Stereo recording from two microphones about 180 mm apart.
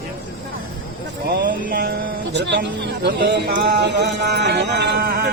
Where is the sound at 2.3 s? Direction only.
75° right (ahead or behind).